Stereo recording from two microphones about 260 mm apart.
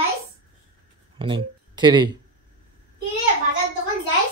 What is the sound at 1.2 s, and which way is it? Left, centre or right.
Speech, centre.